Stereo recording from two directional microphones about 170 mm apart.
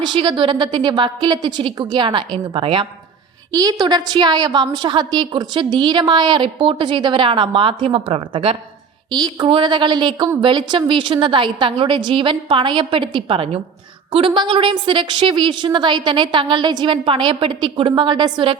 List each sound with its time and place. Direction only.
0.0 s a woman's voice: 30° right (ahead or behind)